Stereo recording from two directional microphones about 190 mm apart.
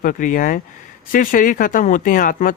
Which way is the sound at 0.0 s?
45° left (ahead or behind).